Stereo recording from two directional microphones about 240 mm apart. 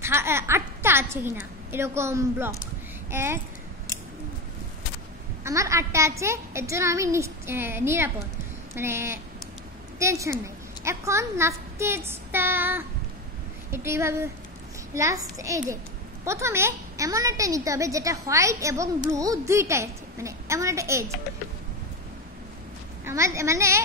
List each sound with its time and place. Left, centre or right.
0.0 s a woman's voice: centre
5.4 s a child's voice: centre
23.0 s a child's voice: centre